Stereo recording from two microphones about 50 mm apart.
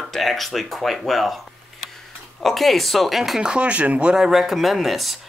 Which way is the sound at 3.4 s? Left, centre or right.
Right.